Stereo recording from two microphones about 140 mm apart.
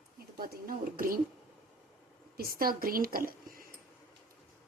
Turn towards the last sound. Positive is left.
turn(degrees=-90)